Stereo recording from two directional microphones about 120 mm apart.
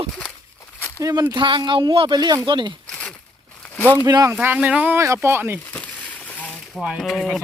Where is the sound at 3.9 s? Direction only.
30° right (ahead or behind).